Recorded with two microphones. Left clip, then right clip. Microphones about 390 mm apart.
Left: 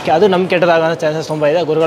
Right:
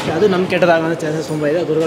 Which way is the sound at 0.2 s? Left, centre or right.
Left.